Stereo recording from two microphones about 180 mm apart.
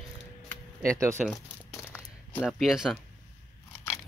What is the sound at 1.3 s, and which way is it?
Crumpling, 15° left (ahead or behind).